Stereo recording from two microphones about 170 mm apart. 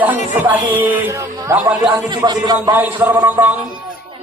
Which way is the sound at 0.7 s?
10° right (ahead or behind).